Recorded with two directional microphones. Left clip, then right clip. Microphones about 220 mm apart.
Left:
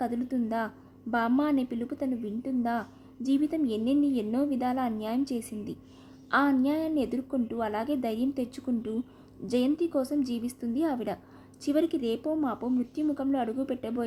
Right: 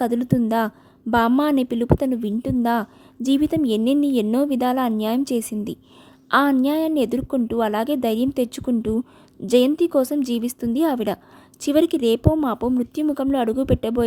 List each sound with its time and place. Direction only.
0.0 s a woman's voice: 40° right (ahead or behind)